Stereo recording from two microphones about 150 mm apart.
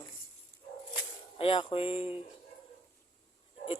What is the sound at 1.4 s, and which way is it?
Speech, 35° left (ahead or behind).